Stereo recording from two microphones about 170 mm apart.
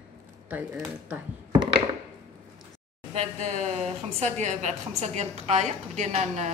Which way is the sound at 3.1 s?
40° right (ahead or behind).